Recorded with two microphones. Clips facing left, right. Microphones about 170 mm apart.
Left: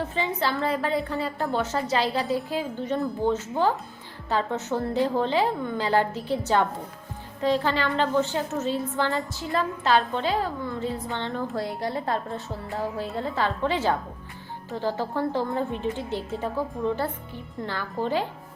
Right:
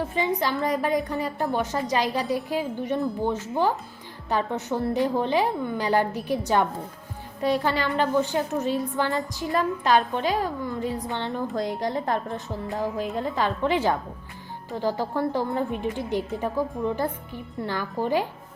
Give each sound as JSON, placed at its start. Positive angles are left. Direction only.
{"t": 0.1, "sound": "a woman's voice", "side_deg": -15}